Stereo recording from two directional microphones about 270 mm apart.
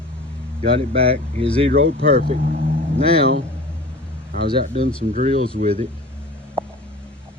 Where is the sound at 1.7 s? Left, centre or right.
Right.